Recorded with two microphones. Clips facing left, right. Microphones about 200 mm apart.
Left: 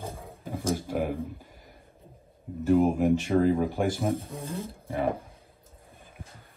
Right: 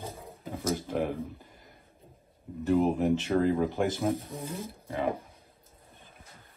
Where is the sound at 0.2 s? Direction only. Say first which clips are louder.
Even; 15° left (ahead or behind).